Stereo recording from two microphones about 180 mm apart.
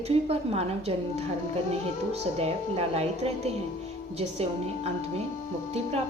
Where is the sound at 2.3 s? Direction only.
35° right (ahead or behind).